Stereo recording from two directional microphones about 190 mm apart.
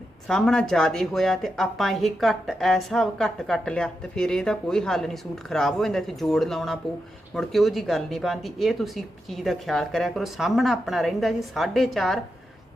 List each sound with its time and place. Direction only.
0.3 s speech: centre (ahead or behind)